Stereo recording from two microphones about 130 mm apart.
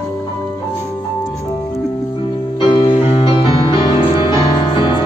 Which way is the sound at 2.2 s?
40° left (ahead or behind).